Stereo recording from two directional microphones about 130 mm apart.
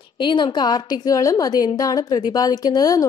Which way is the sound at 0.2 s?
40° left (ahead or behind).